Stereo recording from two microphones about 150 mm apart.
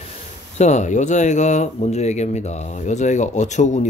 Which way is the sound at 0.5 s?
50° left (ahead or behind).